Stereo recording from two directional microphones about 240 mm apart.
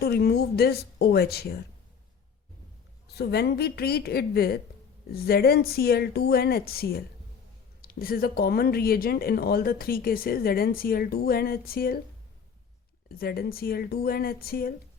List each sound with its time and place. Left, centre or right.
0.0 s speech: left
3.2 s speech: left
13.1 s speech: left